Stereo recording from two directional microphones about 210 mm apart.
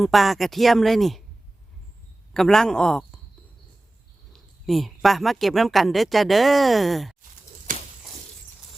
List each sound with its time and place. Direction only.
0.0 s speech: centre (ahead or behind)
2.3 s speech: centre (ahead or behind)
4.3 s speech: centre (ahead or behind)
7.7 s a sound: 40° right (ahead or behind)